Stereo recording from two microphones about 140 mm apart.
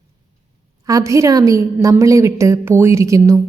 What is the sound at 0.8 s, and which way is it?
A woman's voice, 25° right (ahead or behind).